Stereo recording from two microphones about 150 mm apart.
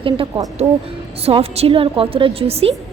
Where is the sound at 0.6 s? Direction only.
20° right (ahead or behind).